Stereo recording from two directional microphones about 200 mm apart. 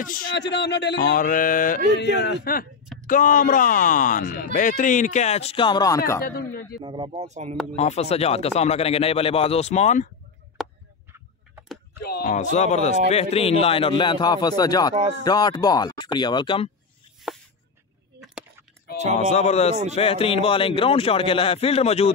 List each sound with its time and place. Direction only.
0.0 s speech: 45° left (ahead or behind)
0.3 s speech: 60° left (ahead or behind); by 1.8 s 45° left (ahead or behind)
2.0 s speech: 60° left (ahead or behind)
3.1 s speech: 40° left (ahead or behind); by 6.2 s 15° left (ahead or behind)
6.2 s speech: 50° left (ahead or behind)
6.8 s speech: 25° right (ahead or behind)
7.2 s speech: 35° right (ahead or behind)
7.7 s speech: 35° left (ahead or behind)
10.6 s a sound: centre (ahead or behind)
12.0 s speech: 50° left (ahead or behind); by 16.7 s 25° left (ahead or behind)
17.3 s a sound: centre (ahead or behind)
19.3 s speech: 35° left (ahead or behind)